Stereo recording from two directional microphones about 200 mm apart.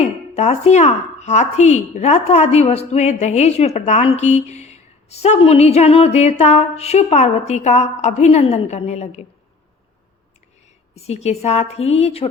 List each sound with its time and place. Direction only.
0.0 s a woman's voice: 35° left (ahead or behind)
10.9 s a woman's voice: 30° left (ahead or behind)